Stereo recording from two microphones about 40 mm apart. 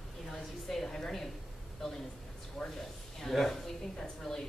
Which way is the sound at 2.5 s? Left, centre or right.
Centre.